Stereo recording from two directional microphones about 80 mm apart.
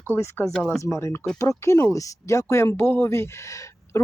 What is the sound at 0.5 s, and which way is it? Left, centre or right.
Speech, centre.